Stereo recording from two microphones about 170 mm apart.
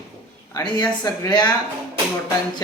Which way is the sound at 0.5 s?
25° left (ahead or behind).